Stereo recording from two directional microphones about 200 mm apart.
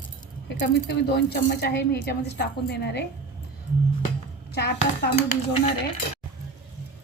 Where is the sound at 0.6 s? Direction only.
60° left (ahead or behind).